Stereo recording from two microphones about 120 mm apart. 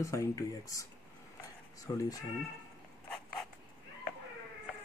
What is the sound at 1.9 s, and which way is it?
Speech, 40° left (ahead or behind).